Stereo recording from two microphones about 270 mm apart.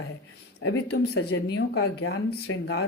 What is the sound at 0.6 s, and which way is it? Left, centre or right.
Speech, left.